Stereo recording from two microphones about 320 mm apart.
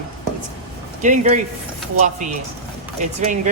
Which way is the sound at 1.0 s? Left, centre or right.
Right.